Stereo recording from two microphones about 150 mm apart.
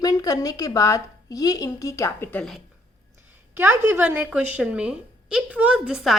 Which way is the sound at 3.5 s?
15° right (ahead or behind).